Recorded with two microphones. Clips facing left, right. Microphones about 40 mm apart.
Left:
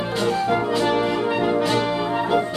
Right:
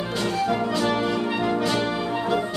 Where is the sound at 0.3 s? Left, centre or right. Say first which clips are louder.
Left 3 dB; left.